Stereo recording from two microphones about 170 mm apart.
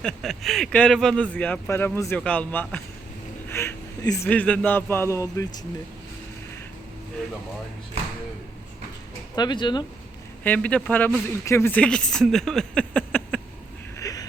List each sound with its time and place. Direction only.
0.0 s speech: centre (ahead or behind)
3.5 s a sound: 15° left (ahead or behind)
4.3 s speech: 10° left (ahead or behind)
9.3 s speech: 25° left (ahead or behind)
10.4 s speech: 10° left (ahead or behind)
14.0 s vehicle: 20° left (ahead or behind)